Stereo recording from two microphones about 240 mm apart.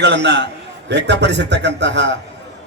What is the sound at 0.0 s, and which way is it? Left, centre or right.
Speech, right.